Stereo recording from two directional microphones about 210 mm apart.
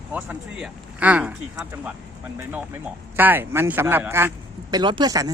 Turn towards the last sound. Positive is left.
turn(degrees=-15)  # may be behind; listen again after turning